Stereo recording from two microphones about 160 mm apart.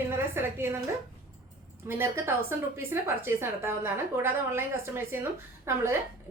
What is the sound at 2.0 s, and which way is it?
A woman's voice, 15° right (ahead or behind).